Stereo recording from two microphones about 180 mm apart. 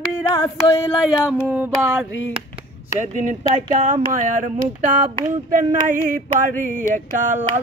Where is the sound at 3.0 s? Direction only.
45° right (ahead or behind).